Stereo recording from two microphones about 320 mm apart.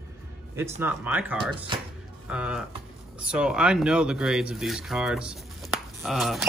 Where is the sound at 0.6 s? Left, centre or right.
Centre.